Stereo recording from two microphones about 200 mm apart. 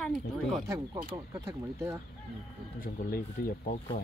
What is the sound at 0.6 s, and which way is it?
Speech, 15° right (ahead or behind).